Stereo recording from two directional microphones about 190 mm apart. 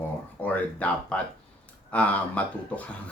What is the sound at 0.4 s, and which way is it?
A man's voice, 5° left (ahead or behind).